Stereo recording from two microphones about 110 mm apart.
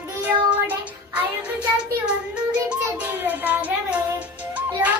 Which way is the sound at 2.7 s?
15° right (ahead or behind).